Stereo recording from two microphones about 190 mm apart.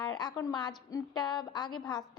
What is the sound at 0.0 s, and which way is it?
A woman's voice, 20° left (ahead or behind).